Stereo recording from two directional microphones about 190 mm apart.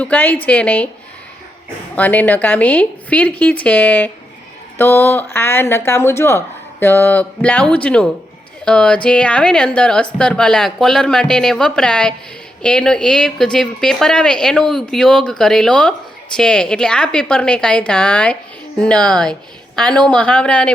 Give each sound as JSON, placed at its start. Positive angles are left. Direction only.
{"t": 0.0, "sound": "speech", "side_deg": 10}
{"t": 2.0, "sound": "speech", "side_deg": 10}